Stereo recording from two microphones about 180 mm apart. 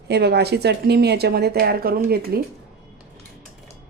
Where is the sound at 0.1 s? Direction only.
65° right (ahead or behind).